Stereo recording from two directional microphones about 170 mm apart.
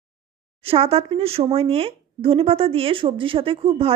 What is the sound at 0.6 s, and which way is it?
A woman's voice, 35° right (ahead or behind).